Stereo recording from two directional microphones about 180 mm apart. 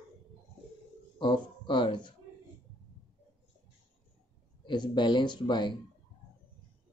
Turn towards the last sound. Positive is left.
turn(degrees=25)  # may be behind; listen again after turning